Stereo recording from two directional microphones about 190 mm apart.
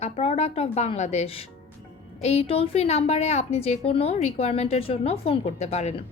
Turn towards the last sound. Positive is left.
turn(degrees=35)  # may be behind; listen again after turning